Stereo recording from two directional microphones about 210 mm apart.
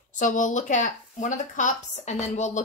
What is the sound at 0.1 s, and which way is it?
A woman's voice, 35° left (ahead or behind).